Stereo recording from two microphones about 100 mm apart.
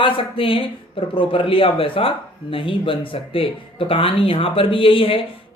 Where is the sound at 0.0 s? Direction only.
60° left (ahead or behind).